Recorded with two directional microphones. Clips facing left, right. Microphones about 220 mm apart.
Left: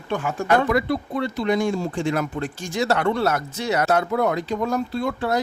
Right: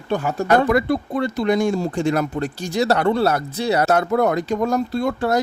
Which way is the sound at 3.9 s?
45° right (ahead or behind).